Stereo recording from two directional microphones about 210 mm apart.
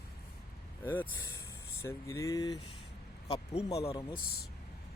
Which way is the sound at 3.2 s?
30° left (ahead or behind).